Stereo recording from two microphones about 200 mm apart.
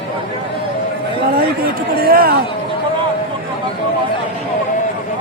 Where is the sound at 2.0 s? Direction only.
50° right (ahead or behind).